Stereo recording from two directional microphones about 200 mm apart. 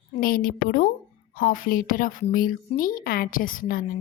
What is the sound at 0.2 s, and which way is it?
A woman's voice, 45° left (ahead or behind).